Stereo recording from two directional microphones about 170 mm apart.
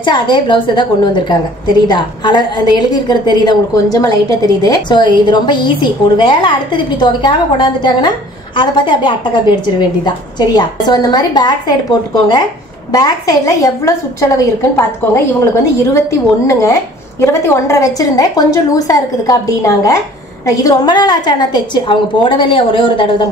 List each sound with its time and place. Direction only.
0.0 s a woman's voice: 25° left (ahead or behind)
12.9 s a woman's voice: 20° left (ahead or behind)